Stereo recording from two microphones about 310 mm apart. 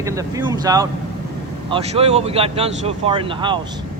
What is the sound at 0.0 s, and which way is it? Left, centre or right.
Speech, centre.